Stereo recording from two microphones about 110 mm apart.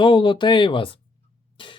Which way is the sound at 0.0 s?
45° left (ahead or behind).